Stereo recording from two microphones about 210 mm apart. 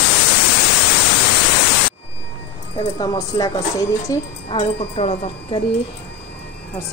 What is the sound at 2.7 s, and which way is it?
Speech, 20° left (ahead or behind).